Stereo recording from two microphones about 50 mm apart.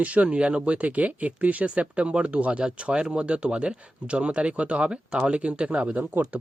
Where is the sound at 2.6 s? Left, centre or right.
Centre.